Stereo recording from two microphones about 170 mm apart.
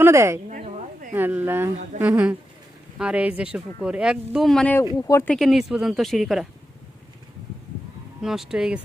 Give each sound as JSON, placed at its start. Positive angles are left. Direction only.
{"t": 0.0, "sound": "speech", "side_deg": -15}
{"t": 0.5, "sound": "a sound", "side_deg": -50}
{"t": 1.1, "sound": "speech", "side_deg": -10}
{"t": 5.0, "sound": "speech", "side_deg": 15}
{"t": 5.3, "sound": "speech", "side_deg": 0}
{"t": 8.2, "sound": "speech", "side_deg": -5}